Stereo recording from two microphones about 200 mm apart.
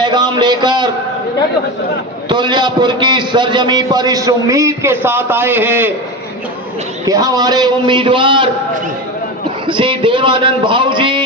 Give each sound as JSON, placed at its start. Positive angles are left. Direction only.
{"t": 0.0, "sound": "a sound", "side_deg": -20}
{"t": 2.3, "sound": "a man's voice", "side_deg": -20}
{"t": 7.1, "sound": "a man's voice", "side_deg": -20}
{"t": 9.6, "sound": "a man's voice", "side_deg": -25}